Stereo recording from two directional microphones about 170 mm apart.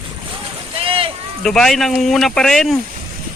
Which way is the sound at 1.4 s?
5° left (ahead or behind).